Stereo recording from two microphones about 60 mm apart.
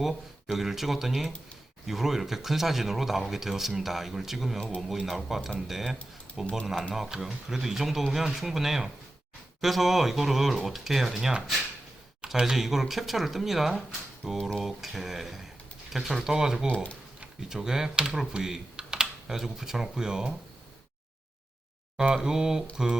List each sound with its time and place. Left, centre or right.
0.0 s speech: centre
6.4 s speech: centre
6.9 s speech: centre
22.1 s speech: centre